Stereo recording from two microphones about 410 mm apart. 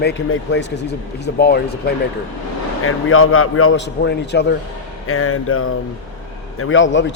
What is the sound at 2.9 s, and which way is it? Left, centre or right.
Speech, left.